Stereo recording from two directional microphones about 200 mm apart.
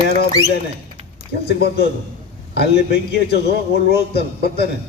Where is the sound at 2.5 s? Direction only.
55° left (ahead or behind).